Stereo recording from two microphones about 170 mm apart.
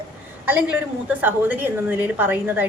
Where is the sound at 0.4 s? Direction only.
10° right (ahead or behind).